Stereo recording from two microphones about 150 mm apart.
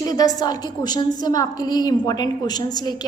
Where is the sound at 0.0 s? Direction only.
25° left (ahead or behind).